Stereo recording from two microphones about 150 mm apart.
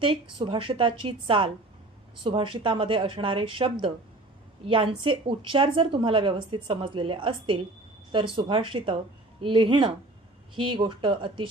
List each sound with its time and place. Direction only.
0.0 s speech: 35° right (ahead or behind)